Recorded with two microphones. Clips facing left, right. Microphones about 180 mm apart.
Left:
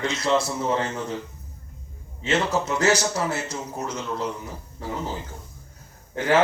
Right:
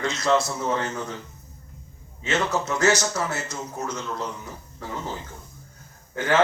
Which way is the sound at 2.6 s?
30° left (ahead or behind).